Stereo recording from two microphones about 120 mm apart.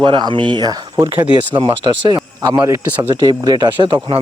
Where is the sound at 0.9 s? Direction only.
20° right (ahead or behind).